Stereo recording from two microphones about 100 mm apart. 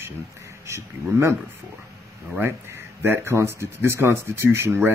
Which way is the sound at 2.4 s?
25° right (ahead or behind).